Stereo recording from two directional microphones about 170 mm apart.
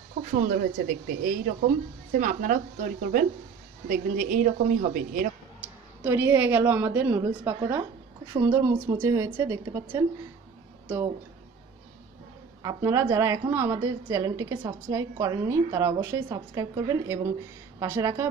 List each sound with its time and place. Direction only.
0.3 s speech: 55° right (ahead or behind)
5.6 s a woman's voice: 10° right (ahead or behind)
12.6 s a woman's voice: 20° right (ahead or behind)